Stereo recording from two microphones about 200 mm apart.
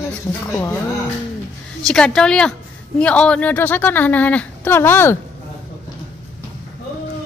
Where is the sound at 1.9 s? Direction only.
5° left (ahead or behind).